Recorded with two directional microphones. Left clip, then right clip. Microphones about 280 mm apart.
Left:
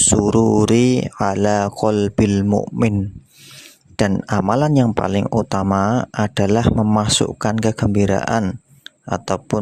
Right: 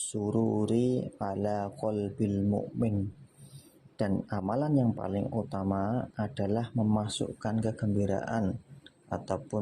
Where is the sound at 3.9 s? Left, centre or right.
Left.